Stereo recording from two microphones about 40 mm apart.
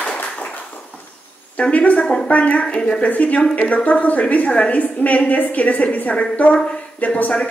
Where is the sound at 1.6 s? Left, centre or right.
Left.